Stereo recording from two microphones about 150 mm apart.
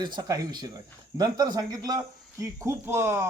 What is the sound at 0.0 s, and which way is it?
A man's voice, 25° right (ahead or behind).